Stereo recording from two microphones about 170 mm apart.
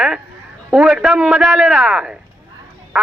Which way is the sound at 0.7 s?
5° right (ahead or behind).